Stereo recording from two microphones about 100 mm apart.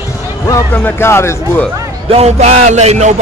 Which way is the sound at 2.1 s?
90° right.